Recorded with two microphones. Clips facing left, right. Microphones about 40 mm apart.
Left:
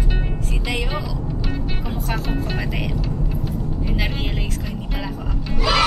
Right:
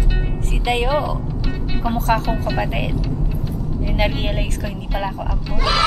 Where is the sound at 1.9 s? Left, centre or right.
Right.